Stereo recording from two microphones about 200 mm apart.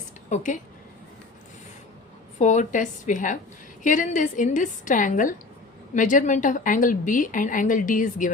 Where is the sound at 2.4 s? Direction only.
40° left (ahead or behind).